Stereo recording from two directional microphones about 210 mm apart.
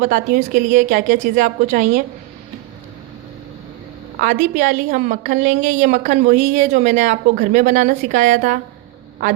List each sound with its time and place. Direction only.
0.0 s a woman's voice: 40° right (ahead or behind)
4.2 s a woman's voice: 40° right (ahead or behind)